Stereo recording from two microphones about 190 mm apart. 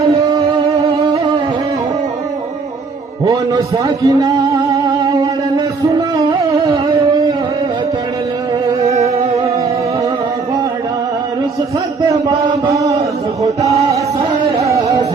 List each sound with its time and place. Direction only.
0.1 s music: 25° right (ahead or behind)
3.2 s music: 20° right (ahead or behind)
8.9 s music: 35° right (ahead or behind)
12.5 s chant: 20° right (ahead or behind)
14.6 s music: 15° right (ahead or behind)